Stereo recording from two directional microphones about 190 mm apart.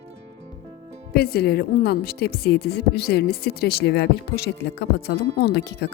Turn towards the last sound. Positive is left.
turn(degrees=60)  # may be behind; listen again after turning